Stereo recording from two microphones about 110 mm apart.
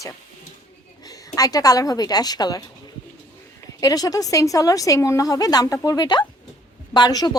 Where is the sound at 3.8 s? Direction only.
35° left (ahead or behind).